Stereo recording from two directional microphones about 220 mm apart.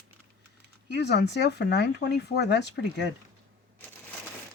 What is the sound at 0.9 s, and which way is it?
Speech, 50° left (ahead or behind).